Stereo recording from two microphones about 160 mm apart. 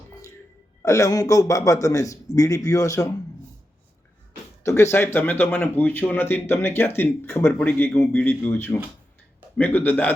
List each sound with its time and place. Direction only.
0.8 s a man's voice: 20° left (ahead or behind)
4.6 s speech: 15° left (ahead or behind)